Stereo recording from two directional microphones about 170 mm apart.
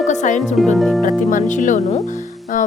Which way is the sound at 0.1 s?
45° left (ahead or behind).